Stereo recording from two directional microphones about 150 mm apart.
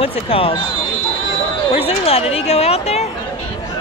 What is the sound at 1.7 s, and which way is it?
A woman's voice, 45° left (ahead or behind).